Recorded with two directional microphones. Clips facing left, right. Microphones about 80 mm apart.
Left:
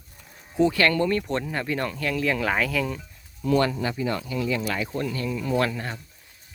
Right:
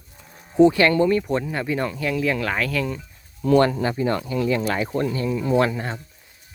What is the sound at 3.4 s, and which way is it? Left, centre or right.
Speech, right.